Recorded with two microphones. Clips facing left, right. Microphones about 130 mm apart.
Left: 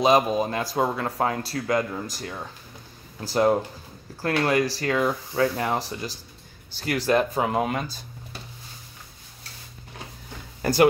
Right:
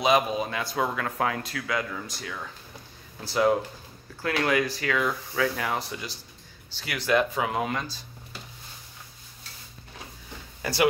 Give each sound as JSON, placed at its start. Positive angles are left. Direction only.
{"t": 0.0, "sound": "speech", "side_deg": 40}
{"t": 10.6, "sound": "speech", "side_deg": 45}